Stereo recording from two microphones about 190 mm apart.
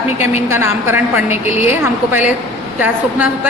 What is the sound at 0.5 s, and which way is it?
A woman's voice, 10° right (ahead or behind).